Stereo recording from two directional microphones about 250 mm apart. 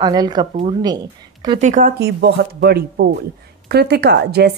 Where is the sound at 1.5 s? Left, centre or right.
Right.